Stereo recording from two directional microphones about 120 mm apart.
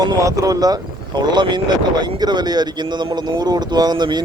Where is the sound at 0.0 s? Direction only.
30° right (ahead or behind).